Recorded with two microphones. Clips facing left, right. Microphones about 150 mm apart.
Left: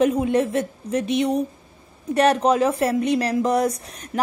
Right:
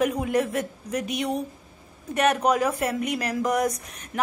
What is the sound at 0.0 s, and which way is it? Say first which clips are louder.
A woman's voice: left 5 dB; 25° left (ahead or behind).